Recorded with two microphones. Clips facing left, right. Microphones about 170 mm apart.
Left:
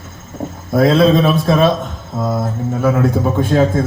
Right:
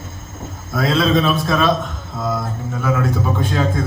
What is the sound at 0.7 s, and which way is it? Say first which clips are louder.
Speech: left 6 dB; 55° left (ahead or behind).